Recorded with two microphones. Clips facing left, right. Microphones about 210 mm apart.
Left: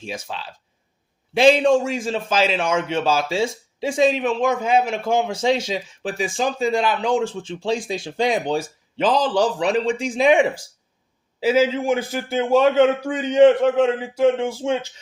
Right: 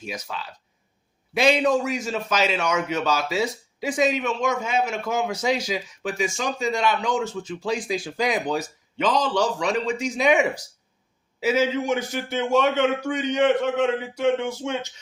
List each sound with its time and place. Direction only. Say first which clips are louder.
0.0 s a man's voice: left 2 dB; 30° left (ahead or behind)